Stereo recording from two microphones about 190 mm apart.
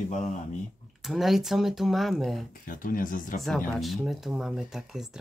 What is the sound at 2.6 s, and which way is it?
Speech, 45° left (ahead or behind).